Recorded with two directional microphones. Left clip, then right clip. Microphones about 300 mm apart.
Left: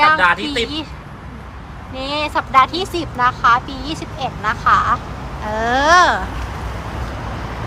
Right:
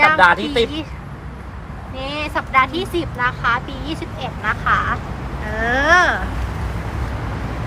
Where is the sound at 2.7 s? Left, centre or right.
Left.